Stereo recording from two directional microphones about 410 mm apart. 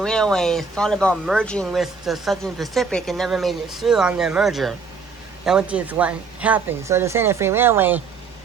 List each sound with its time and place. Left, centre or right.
0.0 s speech: centre